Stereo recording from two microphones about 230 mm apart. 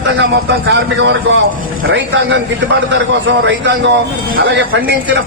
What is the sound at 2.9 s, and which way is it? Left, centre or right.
A man's voice, right.